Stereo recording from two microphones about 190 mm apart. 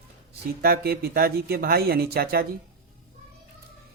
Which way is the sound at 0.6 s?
55° right (ahead or behind).